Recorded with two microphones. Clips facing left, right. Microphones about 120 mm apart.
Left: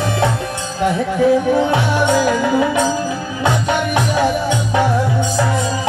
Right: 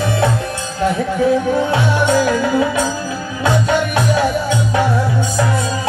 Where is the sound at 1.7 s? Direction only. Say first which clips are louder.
Even; 15° left (ahead or behind).